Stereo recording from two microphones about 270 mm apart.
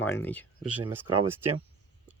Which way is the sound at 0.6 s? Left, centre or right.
Centre.